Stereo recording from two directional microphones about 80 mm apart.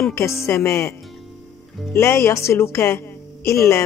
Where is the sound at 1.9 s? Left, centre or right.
Left.